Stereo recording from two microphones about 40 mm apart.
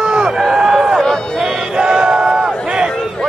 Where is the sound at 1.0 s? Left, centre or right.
Centre.